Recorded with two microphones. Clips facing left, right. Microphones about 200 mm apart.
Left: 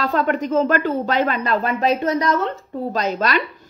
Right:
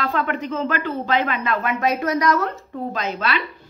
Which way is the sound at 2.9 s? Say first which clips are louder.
Left 5 dB; 40° left (ahead or behind).